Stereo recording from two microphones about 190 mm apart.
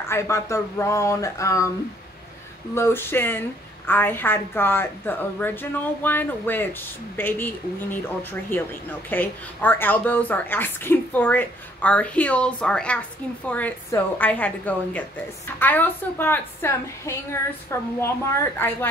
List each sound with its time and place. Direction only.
0.1 s a woman's voice: 15° left (ahead or behind)
2.7 s a woman's voice: 10° left (ahead or behind)